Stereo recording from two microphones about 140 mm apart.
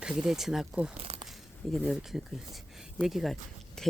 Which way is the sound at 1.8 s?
5° right (ahead or behind).